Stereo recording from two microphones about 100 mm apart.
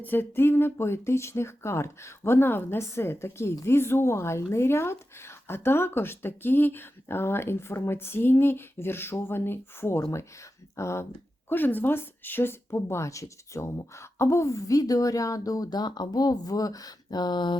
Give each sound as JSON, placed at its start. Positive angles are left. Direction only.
{"t": 0.0, "sound": "speech", "side_deg": 20}